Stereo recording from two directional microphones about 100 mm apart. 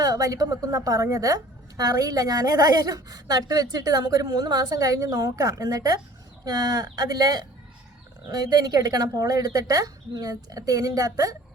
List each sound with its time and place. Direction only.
0.0 s a woman's voice: 35° right (ahead or behind)